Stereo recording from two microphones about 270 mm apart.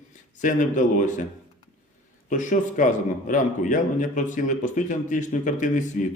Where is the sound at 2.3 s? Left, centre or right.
Left.